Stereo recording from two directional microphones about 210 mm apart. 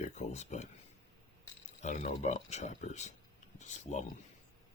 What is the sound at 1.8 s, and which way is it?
Speech, 35° left (ahead or behind).